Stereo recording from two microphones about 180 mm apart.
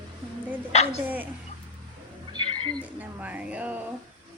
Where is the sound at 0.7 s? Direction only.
35° left (ahead or behind).